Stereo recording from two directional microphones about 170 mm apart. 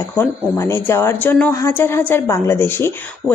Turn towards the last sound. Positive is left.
turn(degrees=15)  # may be behind; listen again after turning